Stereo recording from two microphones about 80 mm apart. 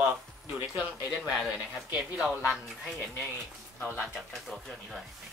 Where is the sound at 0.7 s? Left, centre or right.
Centre.